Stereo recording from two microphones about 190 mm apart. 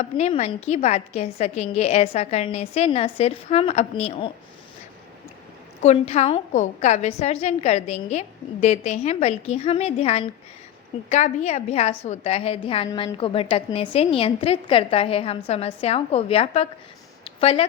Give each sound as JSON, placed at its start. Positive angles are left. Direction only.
{"t": 0.0, "sound": "a woman's voice", "side_deg": 35}
{"t": 5.8, "sound": "a woman's voice", "side_deg": 35}
{"t": 12.9, "sound": "a woman's voice", "side_deg": 20}
{"t": 13.1, "sound": "a woman's voice", "side_deg": 30}
{"t": 17.2, "sound": "a sound", "side_deg": 30}